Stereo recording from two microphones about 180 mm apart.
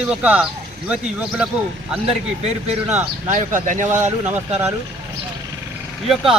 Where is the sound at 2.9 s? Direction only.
40° right (ahead or behind).